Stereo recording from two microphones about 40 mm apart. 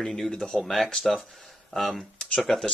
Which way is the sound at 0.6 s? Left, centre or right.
Centre.